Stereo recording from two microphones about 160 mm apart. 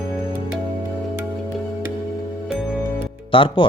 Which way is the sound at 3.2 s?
30° left (ahead or behind).